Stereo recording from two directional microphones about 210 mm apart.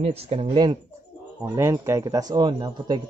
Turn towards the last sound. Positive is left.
turn(degrees=-20)  # may be behind; listen again after turning